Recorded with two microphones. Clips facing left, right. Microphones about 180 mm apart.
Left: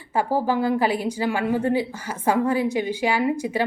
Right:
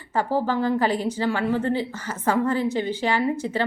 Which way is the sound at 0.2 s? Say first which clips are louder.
Left 1 dB; 10° left (ahead or behind).